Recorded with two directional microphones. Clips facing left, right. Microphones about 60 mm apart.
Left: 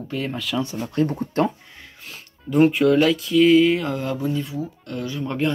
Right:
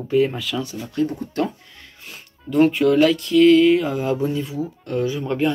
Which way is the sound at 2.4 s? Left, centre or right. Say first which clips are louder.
Even; centre.